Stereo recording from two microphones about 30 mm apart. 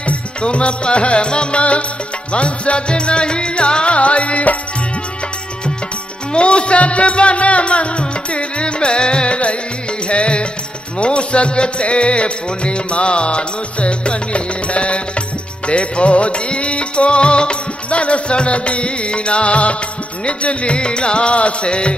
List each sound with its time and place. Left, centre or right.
0.4 s music: left
6.3 s music: left
17.8 s music: left